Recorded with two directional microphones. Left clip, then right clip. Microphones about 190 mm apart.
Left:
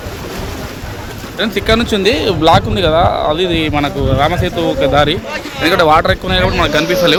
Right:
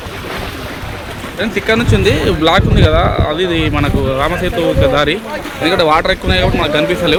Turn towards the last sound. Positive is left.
turn(degrees=5)  # may be behind; listen again after turning